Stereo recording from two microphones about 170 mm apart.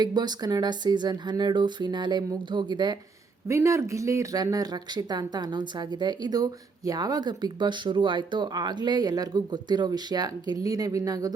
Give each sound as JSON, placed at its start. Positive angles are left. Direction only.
{"t": 0.0, "sound": "speech", "side_deg": -25}